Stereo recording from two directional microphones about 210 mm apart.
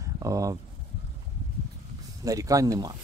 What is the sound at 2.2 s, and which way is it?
Speech, 15° right (ahead or behind).